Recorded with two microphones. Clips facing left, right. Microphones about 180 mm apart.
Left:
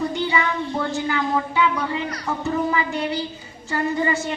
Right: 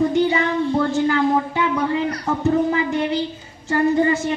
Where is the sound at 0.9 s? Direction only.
50° right (ahead or behind).